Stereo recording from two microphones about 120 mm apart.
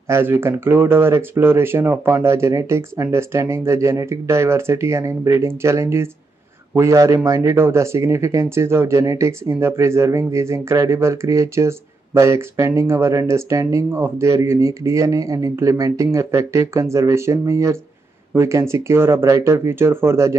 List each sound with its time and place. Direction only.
0.1 s speech: 20° right (ahead or behind)